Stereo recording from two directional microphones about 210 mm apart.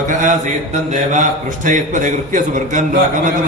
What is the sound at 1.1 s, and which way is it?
A man's voice, 35° right (ahead or behind).